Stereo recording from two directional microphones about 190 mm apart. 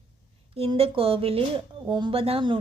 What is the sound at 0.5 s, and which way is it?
Speech, 30° right (ahead or behind).